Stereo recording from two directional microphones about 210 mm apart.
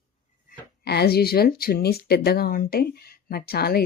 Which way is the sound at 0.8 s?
50° left (ahead or behind).